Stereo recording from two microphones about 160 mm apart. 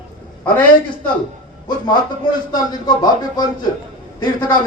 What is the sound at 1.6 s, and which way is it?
Speech, 30° left (ahead or behind).